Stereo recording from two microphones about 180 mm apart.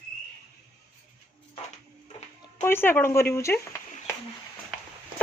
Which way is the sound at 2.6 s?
10° left (ahead or behind).